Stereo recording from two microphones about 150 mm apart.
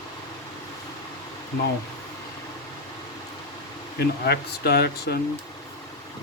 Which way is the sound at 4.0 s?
90° left.